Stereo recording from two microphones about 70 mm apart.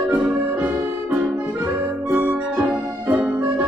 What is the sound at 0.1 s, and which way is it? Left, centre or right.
Accordion, right.